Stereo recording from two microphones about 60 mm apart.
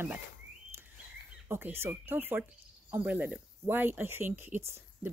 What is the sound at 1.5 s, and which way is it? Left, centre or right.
Speech, right.